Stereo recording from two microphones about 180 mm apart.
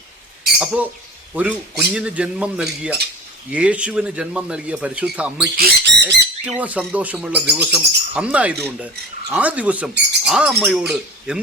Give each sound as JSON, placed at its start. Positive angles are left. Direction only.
{"t": 0.6, "sound": "speech", "side_deg": -5}
{"t": 1.3, "sound": "cutlery", "side_deg": -5}
{"t": 3.5, "sound": "speech", "side_deg": -5}
{"t": 5.5, "sound": "speech", "side_deg": -70}
{"t": 6.4, "sound": "speech", "side_deg": -5}
{"t": 7.5, "sound": "cutlery", "side_deg": -5}
{"t": 9.3, "sound": "speech", "side_deg": -5}
{"t": 10.2, "sound": "cutlery", "side_deg": 0}